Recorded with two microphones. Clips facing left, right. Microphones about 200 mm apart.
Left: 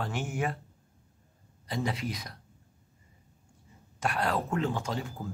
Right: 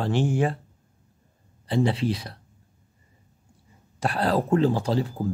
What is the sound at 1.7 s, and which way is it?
Speech, 30° right (ahead or behind).